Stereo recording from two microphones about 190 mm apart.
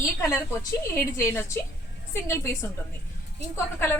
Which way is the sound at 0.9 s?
15° left (ahead or behind).